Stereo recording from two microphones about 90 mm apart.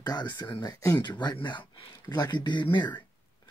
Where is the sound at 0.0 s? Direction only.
50° left (ahead or behind).